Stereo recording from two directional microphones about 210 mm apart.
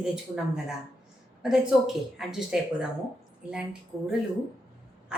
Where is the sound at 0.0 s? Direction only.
5° right (ahead or behind).